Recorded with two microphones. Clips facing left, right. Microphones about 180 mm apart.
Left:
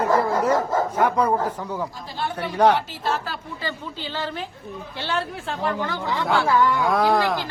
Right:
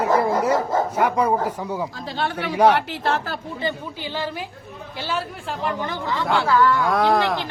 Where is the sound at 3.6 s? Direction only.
15° right (ahead or behind).